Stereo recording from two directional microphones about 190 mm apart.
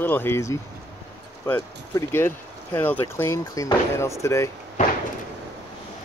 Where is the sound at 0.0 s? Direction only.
10° left (ahead or behind).